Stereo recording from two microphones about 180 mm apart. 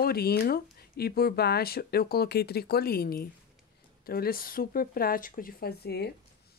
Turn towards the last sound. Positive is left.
turn(degrees=65)  # may be behind; listen again after turning